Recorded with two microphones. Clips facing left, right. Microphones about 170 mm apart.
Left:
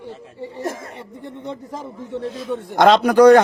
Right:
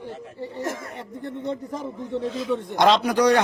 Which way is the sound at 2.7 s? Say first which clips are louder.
Left 6 dB; 55° left (ahead or behind).